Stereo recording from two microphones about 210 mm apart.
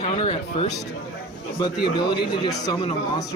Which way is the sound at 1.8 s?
20° left (ahead or behind).